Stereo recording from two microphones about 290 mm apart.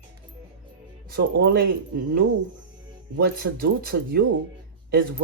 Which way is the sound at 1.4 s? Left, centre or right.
Right.